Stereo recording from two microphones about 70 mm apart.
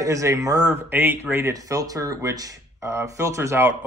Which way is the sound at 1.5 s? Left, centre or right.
Right.